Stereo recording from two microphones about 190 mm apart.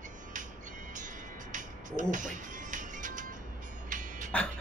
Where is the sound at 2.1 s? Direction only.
40° right (ahead or behind).